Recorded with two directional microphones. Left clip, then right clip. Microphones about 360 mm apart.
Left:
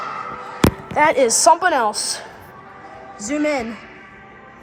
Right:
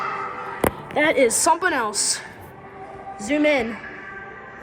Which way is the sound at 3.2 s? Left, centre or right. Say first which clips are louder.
Right 1 dB; centre.